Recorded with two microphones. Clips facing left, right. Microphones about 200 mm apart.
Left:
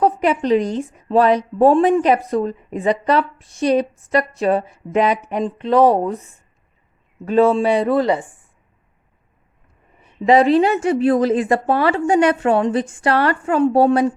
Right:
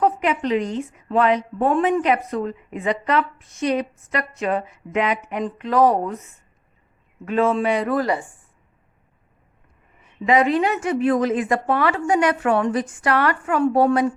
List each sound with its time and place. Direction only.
0.0 s a woman's voice: 35° left (ahead or behind)
10.0 s a woman's voice: 30° left (ahead or behind)